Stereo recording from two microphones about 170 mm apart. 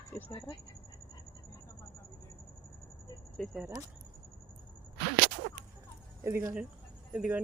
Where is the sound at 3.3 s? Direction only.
Centre (ahead or behind).